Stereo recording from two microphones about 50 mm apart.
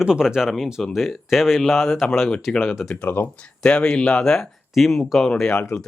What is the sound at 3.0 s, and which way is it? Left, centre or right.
Speech, left.